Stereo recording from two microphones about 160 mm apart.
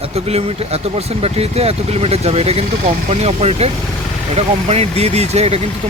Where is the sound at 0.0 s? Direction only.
40° right (ahead or behind).